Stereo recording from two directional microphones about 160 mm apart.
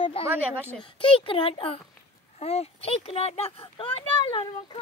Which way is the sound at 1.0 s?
35° left (ahead or behind).